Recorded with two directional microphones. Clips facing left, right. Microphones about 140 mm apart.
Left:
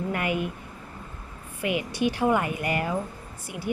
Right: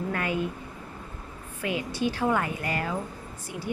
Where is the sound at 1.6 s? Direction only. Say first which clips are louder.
Left 2 dB; 15° left (ahead or behind).